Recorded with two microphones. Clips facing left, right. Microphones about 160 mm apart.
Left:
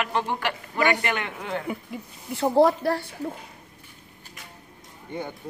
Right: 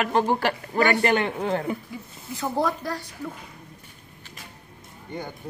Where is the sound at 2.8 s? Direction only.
60° left (ahead or behind).